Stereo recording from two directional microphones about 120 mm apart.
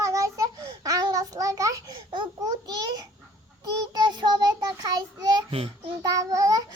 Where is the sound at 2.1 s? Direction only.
35° right (ahead or behind).